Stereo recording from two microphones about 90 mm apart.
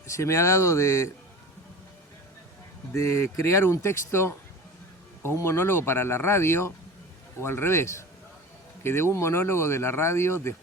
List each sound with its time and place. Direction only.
0.1 s speech: 30° left (ahead or behind)
2.9 s speech: 35° left (ahead or behind)